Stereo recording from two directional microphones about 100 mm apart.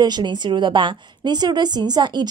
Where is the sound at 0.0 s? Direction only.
45° right (ahead or behind).